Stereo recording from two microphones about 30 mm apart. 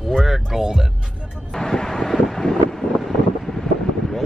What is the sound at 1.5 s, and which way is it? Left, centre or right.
Vehicle, left.